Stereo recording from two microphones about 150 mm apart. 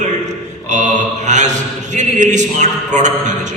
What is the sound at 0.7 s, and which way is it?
Mantra, 55° right (ahead or behind).